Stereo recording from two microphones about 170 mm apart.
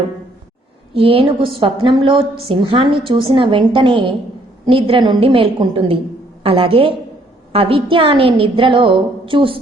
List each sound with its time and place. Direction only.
0.9 s a woman's voice: 35° right (ahead or behind)